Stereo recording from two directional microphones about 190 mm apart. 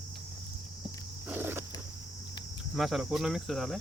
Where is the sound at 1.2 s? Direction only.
10° right (ahead or behind).